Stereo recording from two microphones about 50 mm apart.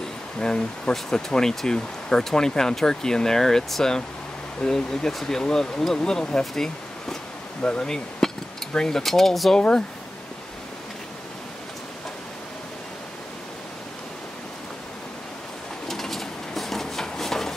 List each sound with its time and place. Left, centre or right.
0.4 s speech: centre
9.6 s speech: centre
15.9 s a sound: centre